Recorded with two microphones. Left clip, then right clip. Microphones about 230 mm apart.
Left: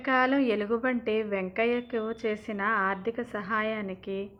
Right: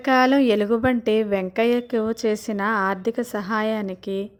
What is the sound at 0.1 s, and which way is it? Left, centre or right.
A woman's voice, right.